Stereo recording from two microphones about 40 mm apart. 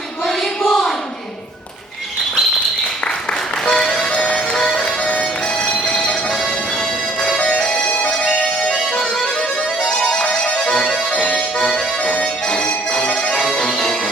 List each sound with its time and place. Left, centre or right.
0.7 s a sound: centre
3.7 s music: centre
4.8 s music: left
7.3 s music: left
9.8 s music: left
10.8 s music: left
12.5 s music: left
13.4 s music: centre